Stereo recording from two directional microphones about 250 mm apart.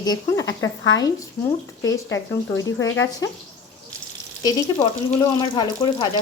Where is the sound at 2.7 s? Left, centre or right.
Left.